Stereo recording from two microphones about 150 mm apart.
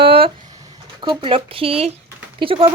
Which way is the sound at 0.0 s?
90° right.